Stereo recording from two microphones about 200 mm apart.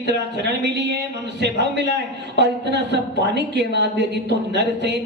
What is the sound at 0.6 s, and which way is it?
Speech, 55° right (ahead or behind).